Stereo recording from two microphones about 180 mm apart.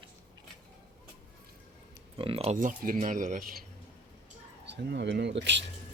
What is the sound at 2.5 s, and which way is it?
Speech, 50° right (ahead or behind).